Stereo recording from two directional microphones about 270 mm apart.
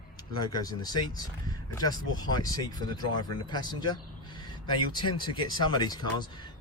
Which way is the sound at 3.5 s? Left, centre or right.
Centre.